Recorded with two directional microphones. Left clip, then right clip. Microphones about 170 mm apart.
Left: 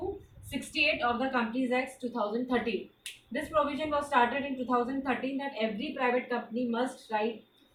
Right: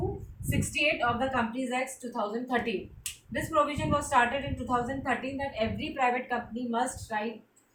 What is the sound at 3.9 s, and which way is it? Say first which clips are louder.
A woman's voice: right 1 dB; 30° right (ahead or behind).